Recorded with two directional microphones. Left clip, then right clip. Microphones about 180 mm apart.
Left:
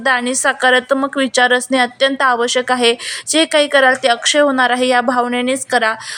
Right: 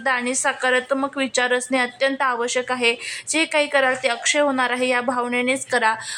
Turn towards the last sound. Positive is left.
turn(degrees=15)  # may be behind; listen again after turning